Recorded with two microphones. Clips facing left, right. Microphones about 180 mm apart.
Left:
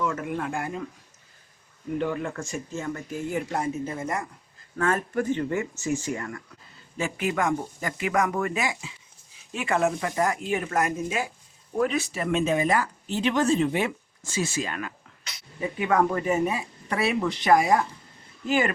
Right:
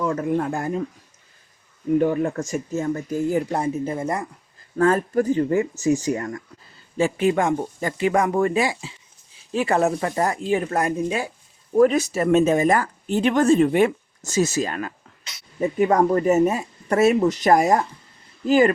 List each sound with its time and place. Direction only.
0.0 s speech: 35° right (ahead or behind)
2.0 s speech: 40° right (ahead or behind)